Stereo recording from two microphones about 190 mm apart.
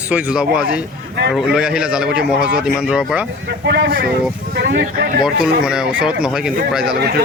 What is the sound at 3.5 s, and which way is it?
Speech, 60° right (ahead or behind).